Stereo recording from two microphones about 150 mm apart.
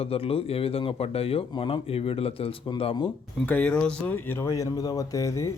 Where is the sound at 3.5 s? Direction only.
10° left (ahead or behind).